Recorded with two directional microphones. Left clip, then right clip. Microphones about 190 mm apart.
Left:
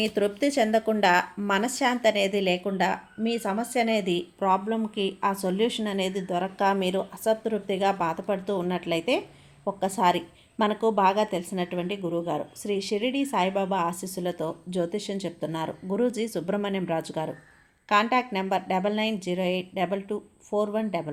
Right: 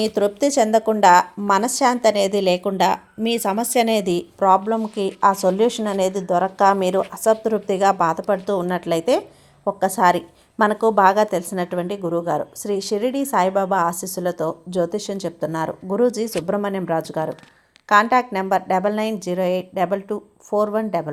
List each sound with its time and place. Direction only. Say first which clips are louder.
0.0 s a woman's voice: right 6 dB; 25° right (ahead or behind)